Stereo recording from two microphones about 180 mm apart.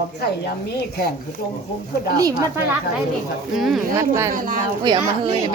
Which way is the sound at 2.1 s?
20° right (ahead or behind).